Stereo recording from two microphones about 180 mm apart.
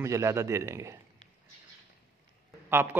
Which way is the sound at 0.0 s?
15° right (ahead or behind).